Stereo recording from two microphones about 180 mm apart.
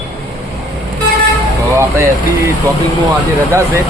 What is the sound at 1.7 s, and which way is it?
Speech, 15° right (ahead or behind).